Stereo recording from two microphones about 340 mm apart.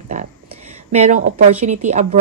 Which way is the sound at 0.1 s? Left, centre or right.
Right.